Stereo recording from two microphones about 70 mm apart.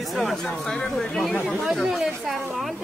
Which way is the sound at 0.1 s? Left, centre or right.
Centre.